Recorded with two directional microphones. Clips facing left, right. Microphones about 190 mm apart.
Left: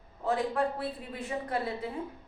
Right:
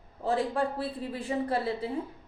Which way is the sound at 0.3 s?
30° right (ahead or behind).